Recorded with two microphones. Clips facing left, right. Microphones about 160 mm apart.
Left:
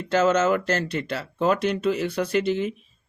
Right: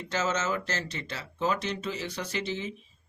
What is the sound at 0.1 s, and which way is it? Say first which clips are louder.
Speech: left 10 dB; 60° left (ahead or behind).